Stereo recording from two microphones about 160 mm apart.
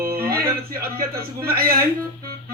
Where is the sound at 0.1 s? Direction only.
65° right (ahead or behind).